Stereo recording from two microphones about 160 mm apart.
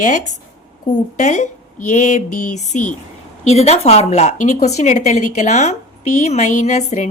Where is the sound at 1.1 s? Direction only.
50° left (ahead or behind).